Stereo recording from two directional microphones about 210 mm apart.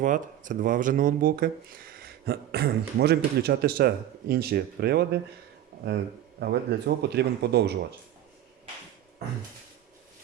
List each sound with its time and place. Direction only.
0.0 s speech: 40° right (ahead or behind)
6.4 s speech: 50° right (ahead or behind)